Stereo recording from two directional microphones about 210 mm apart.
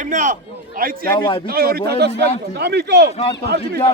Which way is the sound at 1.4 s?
45° right (ahead or behind).